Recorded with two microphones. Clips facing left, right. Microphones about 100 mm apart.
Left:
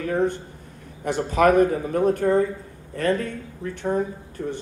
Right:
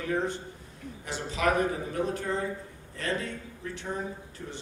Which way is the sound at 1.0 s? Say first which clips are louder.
Left 10 dB; 55° left (ahead or behind).